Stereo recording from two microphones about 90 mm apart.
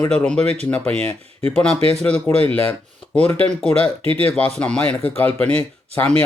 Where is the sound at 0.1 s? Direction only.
10° left (ahead or behind).